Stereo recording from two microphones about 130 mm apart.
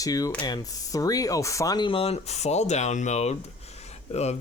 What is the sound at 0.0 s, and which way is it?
Speech, 25° left (ahead or behind).